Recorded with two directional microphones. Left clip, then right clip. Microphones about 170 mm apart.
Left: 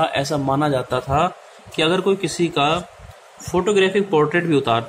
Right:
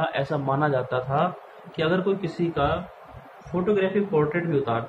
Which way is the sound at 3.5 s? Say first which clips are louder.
Left 6 dB; 60° left (ahead or behind).